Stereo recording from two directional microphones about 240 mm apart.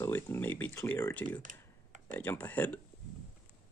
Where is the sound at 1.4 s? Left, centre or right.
Right.